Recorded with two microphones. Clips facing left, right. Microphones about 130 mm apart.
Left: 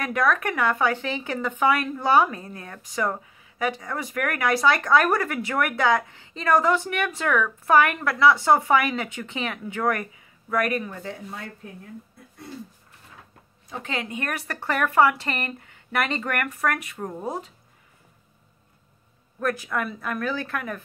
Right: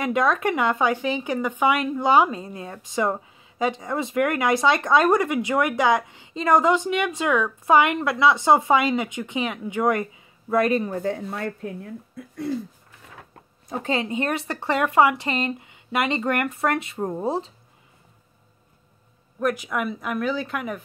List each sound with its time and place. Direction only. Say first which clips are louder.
0.0 s speech: right 2 dB; 20° right (ahead or behind)
11.0 s speech: right 8 dB; 55° right (ahead or behind)
13.7 s speech: right 7 dB; 45° right (ahead or behind)
13.9 s speech: right 4 dB; 30° right (ahead or behind)
19.4 s speech: right 2 dB; 15° right (ahead or behind)